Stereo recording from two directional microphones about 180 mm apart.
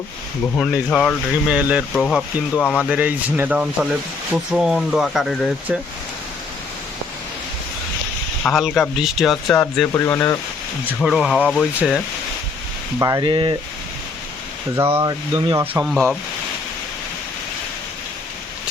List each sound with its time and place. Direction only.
0.7 s speech: 5° left (ahead or behind)
2.9 s speech: 10° right (ahead or behind)
8.4 s speech: centre (ahead or behind)
11.0 s speech: centre (ahead or behind)
13.0 s speech: 20° right (ahead or behind)
14.8 s speech: 15° right (ahead or behind)
15.7 s speech: 10° right (ahead or behind)